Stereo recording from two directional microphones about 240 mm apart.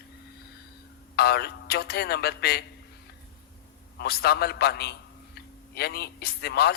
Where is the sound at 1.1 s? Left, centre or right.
Left.